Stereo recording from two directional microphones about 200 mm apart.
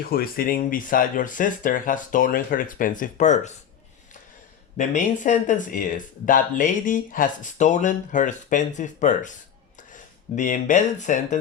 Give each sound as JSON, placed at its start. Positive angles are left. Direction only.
{"t": 0.0, "sound": "speech", "side_deg": 50}
{"t": 4.8, "sound": "speech", "side_deg": 40}